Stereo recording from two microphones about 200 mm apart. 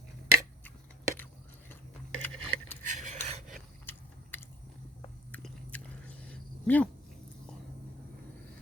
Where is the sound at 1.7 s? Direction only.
10° left (ahead or behind).